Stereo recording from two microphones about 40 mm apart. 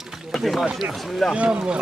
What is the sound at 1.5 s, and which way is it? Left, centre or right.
Speech, right.